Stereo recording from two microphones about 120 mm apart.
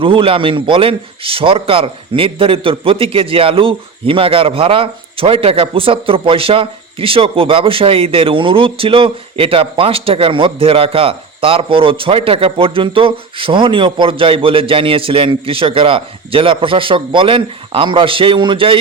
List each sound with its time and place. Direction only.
0.0 s a man's voice: 50° right (ahead or behind)